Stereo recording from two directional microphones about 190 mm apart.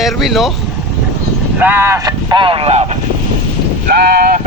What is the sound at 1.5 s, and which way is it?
Speech, 10° right (ahead or behind).